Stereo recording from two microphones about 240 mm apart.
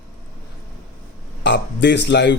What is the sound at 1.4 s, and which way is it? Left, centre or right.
Speech, left.